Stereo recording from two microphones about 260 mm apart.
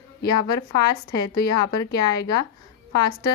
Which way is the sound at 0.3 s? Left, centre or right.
Centre.